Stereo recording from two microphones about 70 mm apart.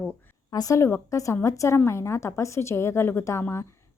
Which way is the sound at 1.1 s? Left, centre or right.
Left.